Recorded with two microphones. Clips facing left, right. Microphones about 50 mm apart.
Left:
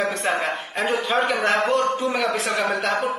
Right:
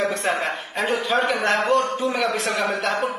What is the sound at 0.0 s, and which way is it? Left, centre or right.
Speech, centre.